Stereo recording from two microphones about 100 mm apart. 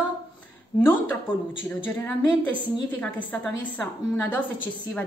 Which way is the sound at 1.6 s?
20° left (ahead or behind).